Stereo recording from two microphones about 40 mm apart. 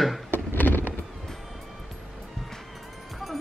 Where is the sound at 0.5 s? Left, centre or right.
Left.